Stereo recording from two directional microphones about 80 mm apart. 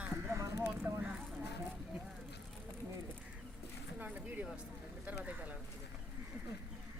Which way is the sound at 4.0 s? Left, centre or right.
Right.